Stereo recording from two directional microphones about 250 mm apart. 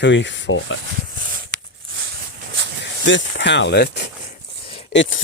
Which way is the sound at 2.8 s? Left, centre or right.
Left.